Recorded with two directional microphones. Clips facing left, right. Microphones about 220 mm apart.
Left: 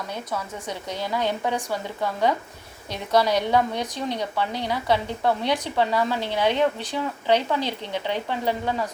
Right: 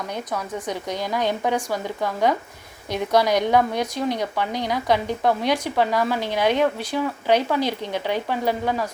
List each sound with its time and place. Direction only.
0.3 s a woman's voice: 15° right (ahead or behind)